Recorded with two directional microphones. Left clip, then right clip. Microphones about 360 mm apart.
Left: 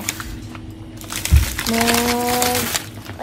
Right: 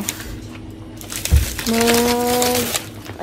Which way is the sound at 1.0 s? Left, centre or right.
Centre.